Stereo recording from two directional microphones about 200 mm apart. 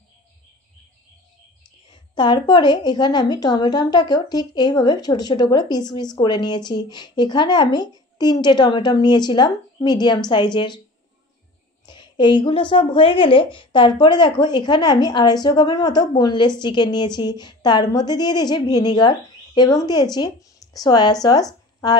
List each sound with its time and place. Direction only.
1.9 s a woman's voice: 20° left (ahead or behind)
11.8 s a woman's voice: 20° left (ahead or behind)